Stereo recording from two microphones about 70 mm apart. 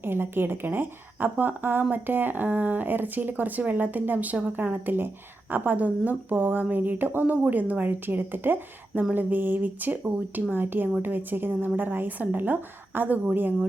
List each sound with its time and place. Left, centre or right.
0.0 s a woman's voice: right